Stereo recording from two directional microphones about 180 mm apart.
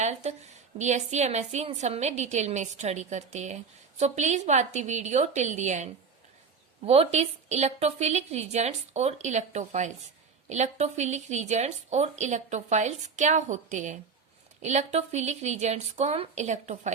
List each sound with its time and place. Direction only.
0.0 s a woman's voice: 40° right (ahead or behind)